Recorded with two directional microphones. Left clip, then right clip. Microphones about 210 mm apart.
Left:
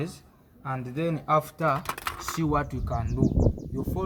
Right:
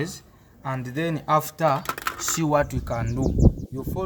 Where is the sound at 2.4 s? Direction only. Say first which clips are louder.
Right 6 dB; 50° right (ahead or behind).